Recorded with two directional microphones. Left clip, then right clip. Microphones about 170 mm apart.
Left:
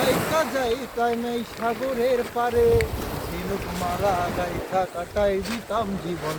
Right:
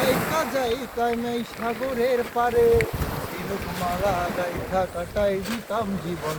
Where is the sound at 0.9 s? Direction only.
15° right (ahead or behind).